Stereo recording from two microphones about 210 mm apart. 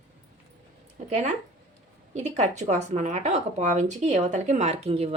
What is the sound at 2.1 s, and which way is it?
Speech, 35° right (ahead or behind).